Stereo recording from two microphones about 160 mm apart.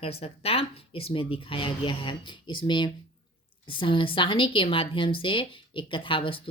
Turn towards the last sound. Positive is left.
turn(degrees=30)  # may be behind; listen again after turning